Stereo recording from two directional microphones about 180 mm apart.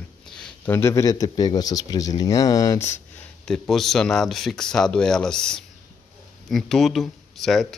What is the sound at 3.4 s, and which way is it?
Speech, centre (ahead or behind).